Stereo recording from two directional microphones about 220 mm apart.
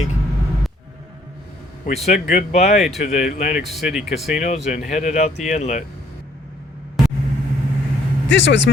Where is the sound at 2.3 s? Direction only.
30° left (ahead or behind).